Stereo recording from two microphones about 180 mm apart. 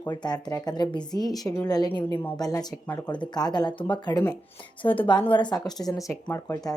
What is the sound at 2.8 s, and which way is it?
Speech, 10° left (ahead or behind).